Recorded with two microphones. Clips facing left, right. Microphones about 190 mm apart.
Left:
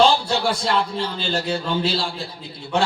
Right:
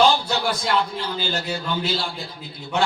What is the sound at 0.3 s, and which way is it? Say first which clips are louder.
A man's voice: left 2 dB; 30° left (ahead or behind).